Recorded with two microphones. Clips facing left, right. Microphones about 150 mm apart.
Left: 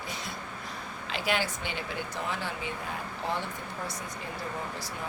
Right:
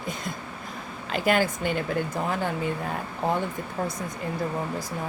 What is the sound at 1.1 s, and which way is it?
Speech, 50° right (ahead or behind).